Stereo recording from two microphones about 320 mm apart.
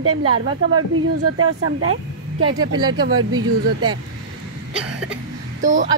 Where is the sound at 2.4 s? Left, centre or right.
Centre.